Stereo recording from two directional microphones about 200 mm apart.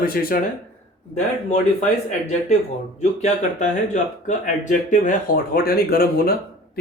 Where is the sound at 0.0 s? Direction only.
45° left (ahead or behind).